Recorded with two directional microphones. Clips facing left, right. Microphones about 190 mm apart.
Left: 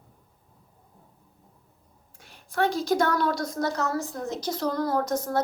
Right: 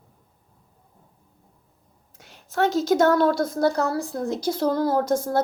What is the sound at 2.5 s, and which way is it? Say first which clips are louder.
Speech: right 4 dB; 25° right (ahead or behind).